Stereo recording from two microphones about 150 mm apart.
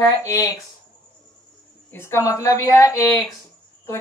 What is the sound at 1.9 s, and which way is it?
Speech, 15° left (ahead or behind).